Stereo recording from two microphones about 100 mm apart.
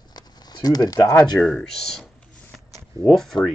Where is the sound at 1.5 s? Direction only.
5° left (ahead or behind).